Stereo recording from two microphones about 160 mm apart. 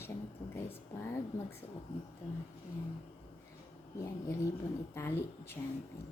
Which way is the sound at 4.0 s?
20° left (ahead or behind).